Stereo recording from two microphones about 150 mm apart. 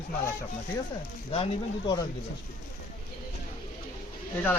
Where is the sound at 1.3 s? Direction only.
30° left (ahead or behind).